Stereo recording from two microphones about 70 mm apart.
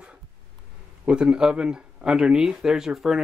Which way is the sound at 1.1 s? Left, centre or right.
Centre.